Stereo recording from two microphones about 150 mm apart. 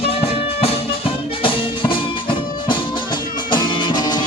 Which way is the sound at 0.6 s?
35° left (ahead or behind).